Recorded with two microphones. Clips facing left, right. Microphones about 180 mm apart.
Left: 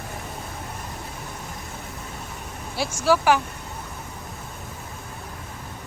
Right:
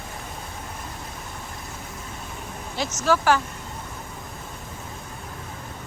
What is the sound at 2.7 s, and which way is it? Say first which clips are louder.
Speech: left 2 dB; 10° left (ahead or behind).